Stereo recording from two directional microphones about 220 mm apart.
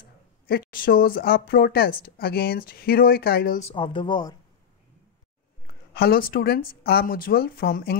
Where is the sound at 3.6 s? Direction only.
25° left (ahead or behind).